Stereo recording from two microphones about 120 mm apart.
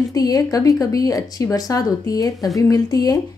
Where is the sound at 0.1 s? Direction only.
30° left (ahead or behind).